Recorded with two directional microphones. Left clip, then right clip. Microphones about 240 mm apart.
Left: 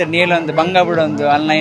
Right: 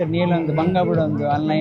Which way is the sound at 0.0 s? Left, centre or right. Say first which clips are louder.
Left 7 dB; left.